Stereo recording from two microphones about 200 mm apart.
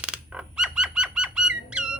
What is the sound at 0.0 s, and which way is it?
Bird, 5° right (ahead or behind).